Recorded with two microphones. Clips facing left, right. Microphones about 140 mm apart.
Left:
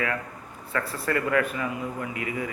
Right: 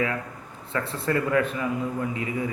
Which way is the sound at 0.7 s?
25° right (ahead or behind).